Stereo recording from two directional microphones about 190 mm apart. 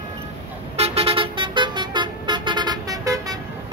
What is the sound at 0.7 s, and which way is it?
Vehicle, 30° right (ahead or behind).